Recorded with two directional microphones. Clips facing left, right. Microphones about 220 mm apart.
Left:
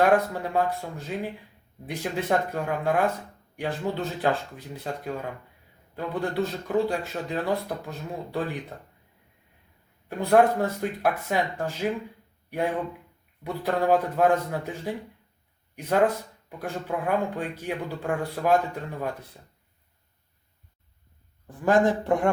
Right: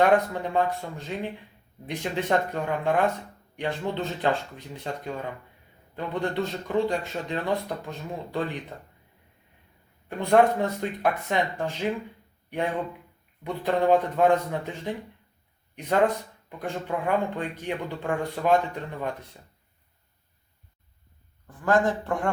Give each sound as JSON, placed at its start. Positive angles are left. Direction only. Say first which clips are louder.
{"t": 0.0, "sound": "a man's voice", "louder": "even", "side_deg": 5}
{"t": 10.1, "sound": "a man's voice", "louder": "even", "side_deg": 5}
{"t": 21.4, "sound": "speech", "louder": "left 2 dB", "side_deg": 15}